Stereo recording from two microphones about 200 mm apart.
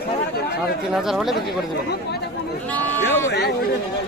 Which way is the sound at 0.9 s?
Centre (ahead or behind).